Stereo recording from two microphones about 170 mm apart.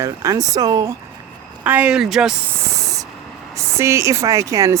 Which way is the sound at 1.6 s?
10° right (ahead or behind).